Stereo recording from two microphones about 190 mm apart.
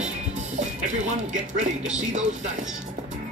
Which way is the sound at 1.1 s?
40° right (ahead or behind).